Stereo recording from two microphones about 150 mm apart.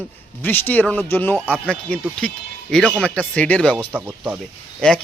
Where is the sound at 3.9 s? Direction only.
10° right (ahead or behind).